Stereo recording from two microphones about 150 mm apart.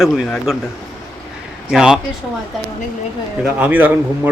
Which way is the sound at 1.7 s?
5° right (ahead or behind).